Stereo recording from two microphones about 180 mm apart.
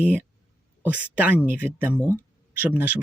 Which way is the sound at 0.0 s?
10° right (ahead or behind).